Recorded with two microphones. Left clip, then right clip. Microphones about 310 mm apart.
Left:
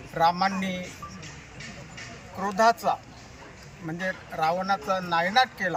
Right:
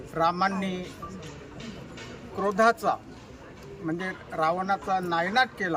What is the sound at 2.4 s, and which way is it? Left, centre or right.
Speech, centre.